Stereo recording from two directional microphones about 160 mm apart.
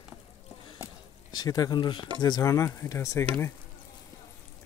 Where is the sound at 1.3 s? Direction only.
25° left (ahead or behind).